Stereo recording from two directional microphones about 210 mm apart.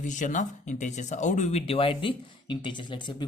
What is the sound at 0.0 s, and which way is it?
Speech, 35° left (ahead or behind).